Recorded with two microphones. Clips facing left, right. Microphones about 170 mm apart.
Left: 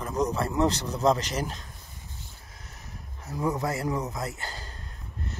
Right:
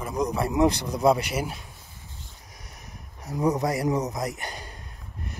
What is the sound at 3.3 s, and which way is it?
Speech, 20° right (ahead or behind).